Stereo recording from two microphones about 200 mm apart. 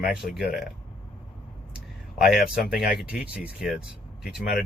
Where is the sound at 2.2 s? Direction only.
45° left (ahead or behind).